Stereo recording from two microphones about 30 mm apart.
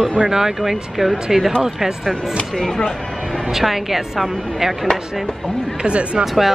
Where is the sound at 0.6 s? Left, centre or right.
Centre.